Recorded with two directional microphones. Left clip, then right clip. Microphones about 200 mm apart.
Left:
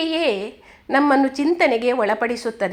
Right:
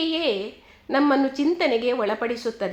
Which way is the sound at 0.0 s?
30° left (ahead or behind).